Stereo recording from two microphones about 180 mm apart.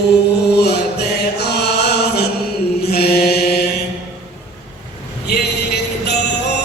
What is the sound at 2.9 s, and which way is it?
Mantra, 60° left (ahead or behind).